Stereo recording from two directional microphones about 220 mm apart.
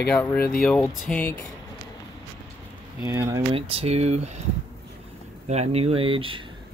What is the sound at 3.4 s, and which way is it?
Speech, 25° right (ahead or behind).